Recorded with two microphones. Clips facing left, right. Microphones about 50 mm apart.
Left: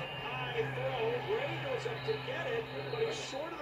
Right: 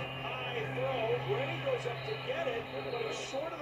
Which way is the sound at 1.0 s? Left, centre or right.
Right.